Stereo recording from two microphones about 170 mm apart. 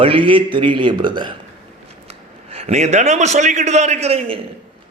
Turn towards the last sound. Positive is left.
turn(degrees=-35)  # may be behind; listen again after turning